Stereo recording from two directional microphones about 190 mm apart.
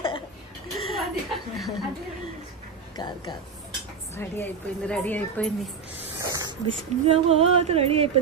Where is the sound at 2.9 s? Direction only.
25° left (ahead or behind).